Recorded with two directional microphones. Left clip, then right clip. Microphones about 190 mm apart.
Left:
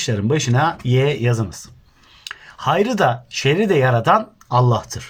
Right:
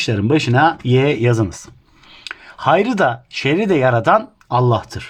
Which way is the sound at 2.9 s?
55° right (ahead or behind).